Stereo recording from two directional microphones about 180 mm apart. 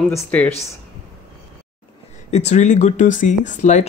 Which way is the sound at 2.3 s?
40° left (ahead or behind).